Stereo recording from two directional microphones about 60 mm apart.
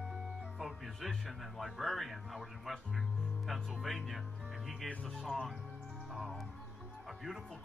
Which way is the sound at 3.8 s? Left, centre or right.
Centre.